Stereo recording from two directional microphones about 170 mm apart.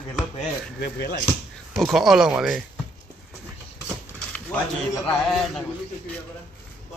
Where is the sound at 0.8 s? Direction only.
75° left (ahead or behind).